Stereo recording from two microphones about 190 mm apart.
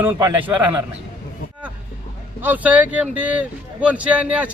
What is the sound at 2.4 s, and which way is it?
Speech, 10° right (ahead or behind).